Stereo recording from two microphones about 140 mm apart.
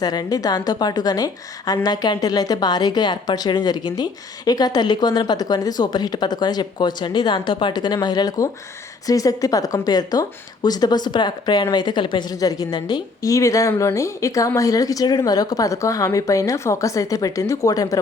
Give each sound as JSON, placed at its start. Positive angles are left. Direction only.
{"t": 0.0, "sound": "speech", "side_deg": 30}